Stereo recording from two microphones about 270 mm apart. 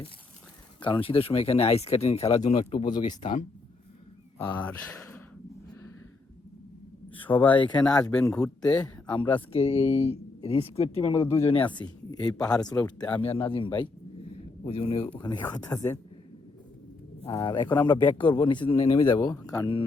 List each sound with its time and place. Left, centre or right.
0.8 s a man's voice: centre
4.4 s speech: centre
7.3 s a man's voice: centre
9.5 s a woman's voice: left
12.3 s speech: centre
13.3 s a man's voice: centre
17.2 s a man's voice: centre